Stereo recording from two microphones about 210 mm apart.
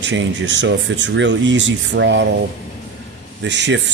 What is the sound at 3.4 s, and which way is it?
Speech, 55° right (ahead or behind).